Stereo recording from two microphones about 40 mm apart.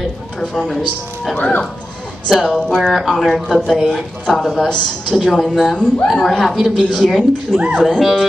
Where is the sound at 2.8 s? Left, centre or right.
Centre.